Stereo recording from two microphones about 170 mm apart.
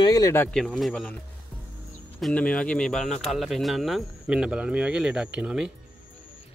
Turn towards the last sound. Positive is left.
turn(degrees=-5)  # may be behind; listen again after turning